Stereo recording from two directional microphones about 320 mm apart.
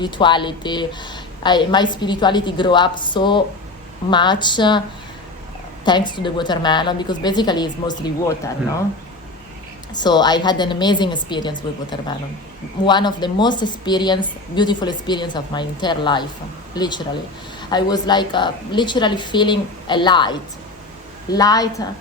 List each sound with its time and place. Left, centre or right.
0.0 s a woman's voice: centre
5.8 s a woman's voice: centre
9.9 s a woman's voice: centre